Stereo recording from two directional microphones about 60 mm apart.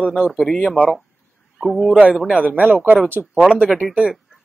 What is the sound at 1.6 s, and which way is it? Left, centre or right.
Speech, centre.